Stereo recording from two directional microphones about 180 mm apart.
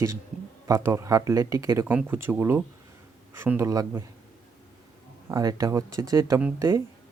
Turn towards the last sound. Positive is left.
turn(degrees=-10)  # may be behind; listen again after turning